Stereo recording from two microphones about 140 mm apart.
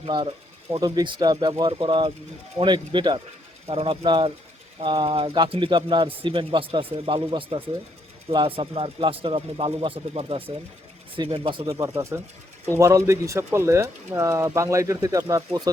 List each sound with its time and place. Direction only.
0.0 s speech: 35° right (ahead or behind)
3.7 s speech: 45° right (ahead or behind)
11.8 s speech: 20° right (ahead or behind)